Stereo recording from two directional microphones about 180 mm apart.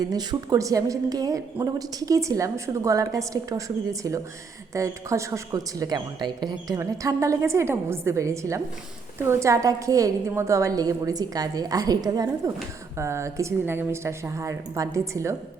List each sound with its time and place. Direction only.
0.0 s a woman's voice: 20° right (ahead or behind)
4.7 s a woman's voice: 15° right (ahead or behind)